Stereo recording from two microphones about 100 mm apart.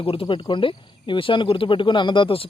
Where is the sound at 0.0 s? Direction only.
60° left (ahead or behind).